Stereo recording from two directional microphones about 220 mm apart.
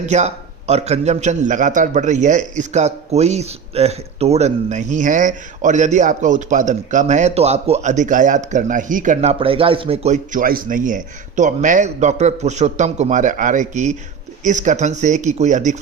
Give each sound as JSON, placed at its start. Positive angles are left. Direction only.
{"t": 0.0, "sound": "a man's voice", "side_deg": -30}